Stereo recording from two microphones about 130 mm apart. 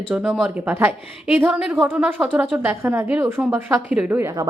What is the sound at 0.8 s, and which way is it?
A woman's voice, 15° right (ahead or behind).